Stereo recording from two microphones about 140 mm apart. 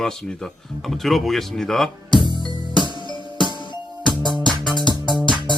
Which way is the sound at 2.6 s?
35° right (ahead or behind).